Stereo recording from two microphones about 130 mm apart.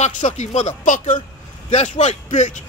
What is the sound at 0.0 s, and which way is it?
Speech, 65° left (ahead or behind).